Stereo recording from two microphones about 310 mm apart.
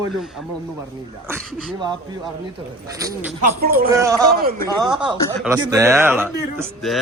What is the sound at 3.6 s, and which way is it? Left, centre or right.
Speech, right.